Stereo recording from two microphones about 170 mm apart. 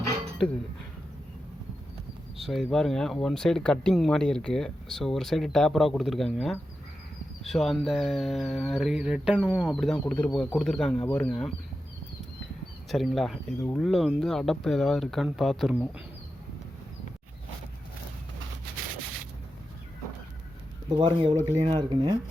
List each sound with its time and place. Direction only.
2.4 s speech: centre (ahead or behind)
12.9 s speech: centre (ahead or behind)
21.0 s speech: 30° right (ahead or behind)